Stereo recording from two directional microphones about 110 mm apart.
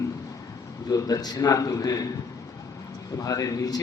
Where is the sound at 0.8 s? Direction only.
35° left (ahead or behind).